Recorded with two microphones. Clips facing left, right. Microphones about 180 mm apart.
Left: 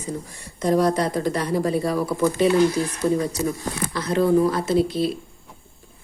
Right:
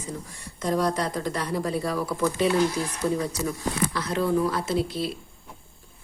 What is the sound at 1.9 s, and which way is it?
Speech, 15° left (ahead or behind).